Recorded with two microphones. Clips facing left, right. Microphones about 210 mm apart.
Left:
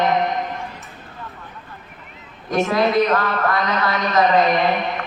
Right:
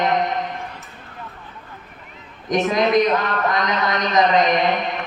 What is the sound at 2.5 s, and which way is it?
A man's voice, 15° right (ahead or behind).